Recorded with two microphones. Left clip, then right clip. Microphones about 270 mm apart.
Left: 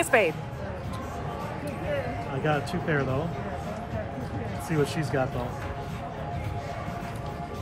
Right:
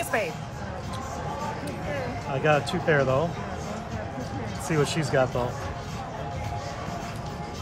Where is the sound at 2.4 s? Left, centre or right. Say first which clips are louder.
Right 5 dB; right.